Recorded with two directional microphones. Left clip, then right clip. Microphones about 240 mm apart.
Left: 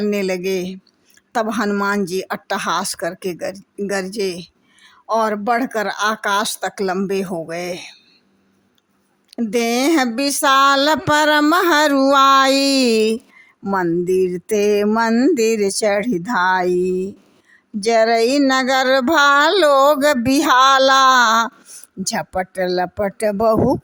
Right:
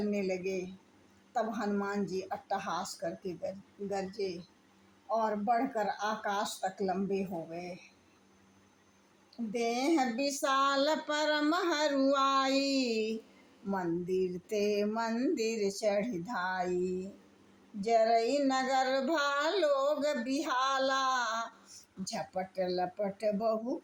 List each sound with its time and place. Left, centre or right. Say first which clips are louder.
0.1 s speech: left 14 dB; left
9.3 s speech: left 15 dB; left